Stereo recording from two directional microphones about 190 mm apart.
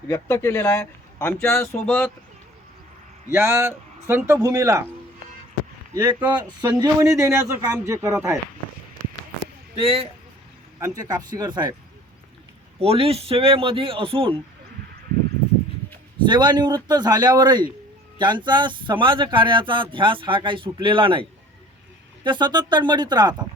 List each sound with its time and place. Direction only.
0.1 s speech: 15° left (ahead or behind)
3.3 s speech: 15° right (ahead or behind)
6.2 s speech: 20° right (ahead or behind)
9.8 s speech: 30° right (ahead or behind)
10.8 s speech: 20° right (ahead or behind)
12.8 s speech: 30° right (ahead or behind)
16.2 s speech: 25° right (ahead or behind)